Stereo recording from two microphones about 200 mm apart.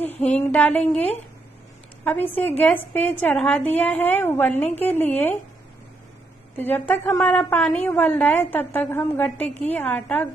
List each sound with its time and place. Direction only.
0.3 s a woman's voice: 5° left (ahead or behind)
6.5 s a woman's voice: 10° left (ahead or behind)